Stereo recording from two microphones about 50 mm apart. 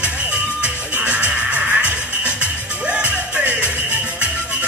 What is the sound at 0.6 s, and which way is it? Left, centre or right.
Music, right.